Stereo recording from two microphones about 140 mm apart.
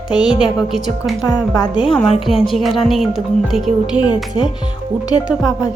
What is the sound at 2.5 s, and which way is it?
Speech, centre (ahead or behind).